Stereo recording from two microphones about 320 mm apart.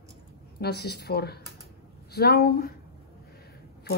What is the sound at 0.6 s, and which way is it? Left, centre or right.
Speech, left.